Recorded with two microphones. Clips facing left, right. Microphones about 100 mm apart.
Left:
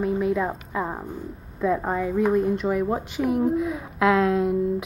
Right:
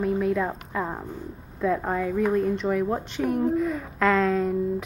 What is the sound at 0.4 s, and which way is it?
Speech, 10° left (ahead or behind).